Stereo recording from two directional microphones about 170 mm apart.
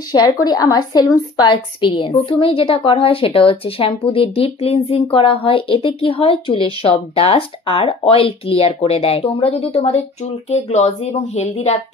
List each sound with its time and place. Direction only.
0.1 s a woman's voice: 25° left (ahead or behind); by 11.8 s 40° left (ahead or behind)